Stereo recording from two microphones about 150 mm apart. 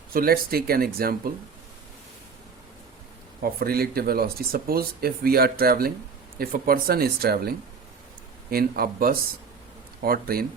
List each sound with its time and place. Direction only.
0.1 s speech: 80° right
3.4 s speech: 85° right